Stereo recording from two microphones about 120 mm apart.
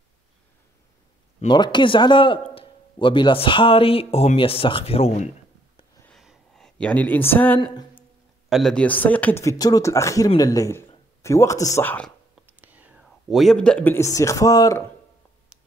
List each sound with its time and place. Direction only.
1.5 s a man's voice: 40° left (ahead or behind); by 5.3 s 65° left (ahead or behind)
6.1 s a sound: centre (ahead or behind)
8.5 s a man's voice: centre (ahead or behind)
9.4 s speech: 30° left (ahead or behind)
11.8 s a man's voice: 15° left (ahead or behind)
12.5 s whispering: 15° right (ahead or behind)
13.3 s a man's voice: centre (ahead or behind)
13.9 s speech: 25° left (ahead or behind)